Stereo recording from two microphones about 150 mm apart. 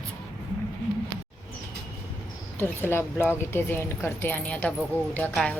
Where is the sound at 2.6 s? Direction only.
15° left (ahead or behind).